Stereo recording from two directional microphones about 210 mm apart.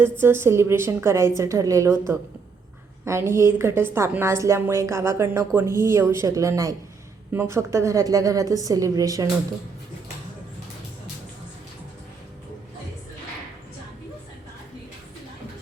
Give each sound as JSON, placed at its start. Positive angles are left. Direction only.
{"t": 0.0, "sound": "a woman's voice", "side_deg": -10}